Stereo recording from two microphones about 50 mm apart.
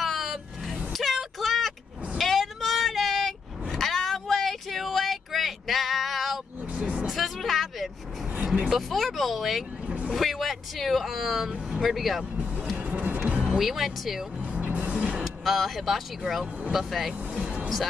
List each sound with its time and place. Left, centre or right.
0.0 s vehicle: centre
0.9 s a sound: centre
2.1 s vehicle: centre
6.7 s vehicle: right
7.1 s a sound: centre
8.7 s speech: centre
9.8 s vehicle: right
10.1 s speech: centre
12.7 s music: right
13.5 s speech: centre
14.4 s vehicle: right
15.2 s speech: centre
17.4 s speech: right